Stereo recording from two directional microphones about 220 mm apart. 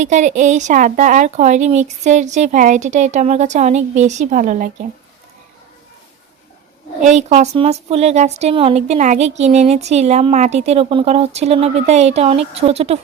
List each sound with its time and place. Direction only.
0.0 s a woman's voice: 35° right (ahead or behind)
7.0 s speech: 30° right (ahead or behind)